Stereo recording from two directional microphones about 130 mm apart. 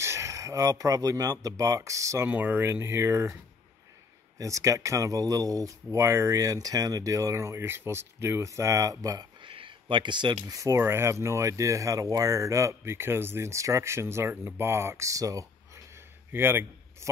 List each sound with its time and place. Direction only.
0.0 s speech: 20° right (ahead or behind)
4.4 s a man's voice: 25° right (ahead or behind)